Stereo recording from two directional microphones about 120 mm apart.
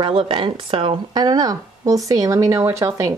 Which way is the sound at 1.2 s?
30° right (ahead or behind).